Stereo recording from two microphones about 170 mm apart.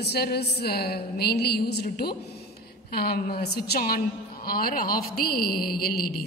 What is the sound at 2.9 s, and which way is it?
Speech, 65° left (ahead or behind).